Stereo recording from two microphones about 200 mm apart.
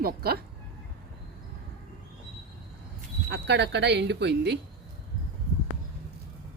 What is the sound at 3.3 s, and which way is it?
Speech, 60° right (ahead or behind).